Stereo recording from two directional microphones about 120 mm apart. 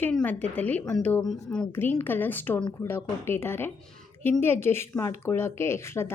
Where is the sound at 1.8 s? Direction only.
20° left (ahead or behind).